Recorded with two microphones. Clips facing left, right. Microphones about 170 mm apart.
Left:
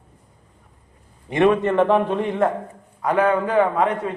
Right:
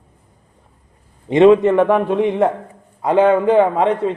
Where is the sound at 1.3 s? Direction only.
20° right (ahead or behind).